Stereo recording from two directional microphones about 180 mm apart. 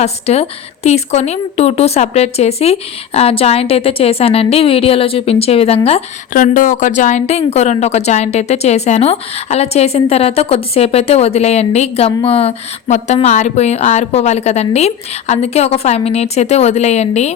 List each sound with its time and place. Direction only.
0.0 s a woman's voice: 35° left (ahead or behind)
6.3 s a woman's voice: 45° left (ahead or behind)